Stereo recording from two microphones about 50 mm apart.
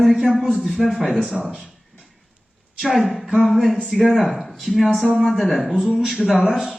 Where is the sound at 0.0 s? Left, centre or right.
Centre.